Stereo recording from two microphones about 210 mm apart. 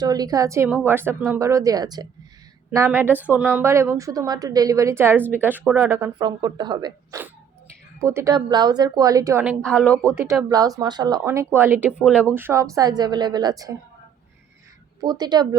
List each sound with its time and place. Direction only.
0.0 s a woman's voice: 20° right (ahead or behind)
6.1 s a woman's voice: 20° right (ahead or behind)
9.6 s speech: 5° left (ahead or behind)
10.5 s a woman's voice: 20° right (ahead or behind)
15.0 s speech: 20° right (ahead or behind)